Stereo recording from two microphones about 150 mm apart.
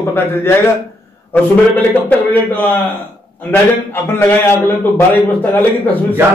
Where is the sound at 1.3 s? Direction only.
10° left (ahead or behind).